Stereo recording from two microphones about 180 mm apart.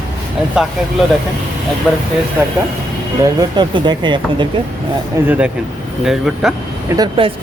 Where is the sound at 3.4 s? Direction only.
25° right (ahead or behind).